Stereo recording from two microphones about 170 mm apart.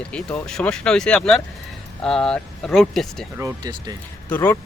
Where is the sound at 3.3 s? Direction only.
20° right (ahead or behind).